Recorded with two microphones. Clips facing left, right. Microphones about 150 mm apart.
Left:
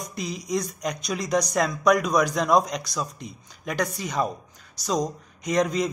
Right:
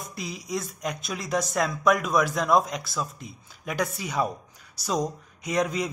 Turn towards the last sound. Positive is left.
turn(degrees=-5)  # may be behind; listen again after turning